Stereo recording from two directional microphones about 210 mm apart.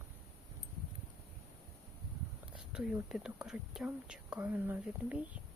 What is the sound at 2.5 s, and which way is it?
Speech, 5° right (ahead or behind).